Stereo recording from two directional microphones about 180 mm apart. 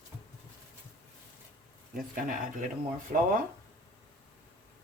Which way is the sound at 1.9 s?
50° right (ahead or behind).